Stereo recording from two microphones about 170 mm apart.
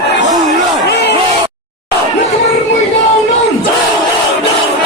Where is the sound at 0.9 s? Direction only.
85° left.